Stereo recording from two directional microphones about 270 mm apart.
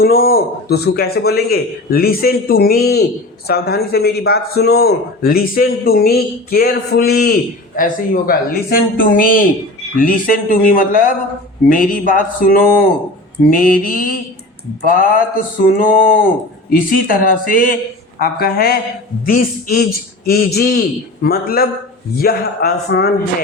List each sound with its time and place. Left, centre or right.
0.0 s a man's voice: left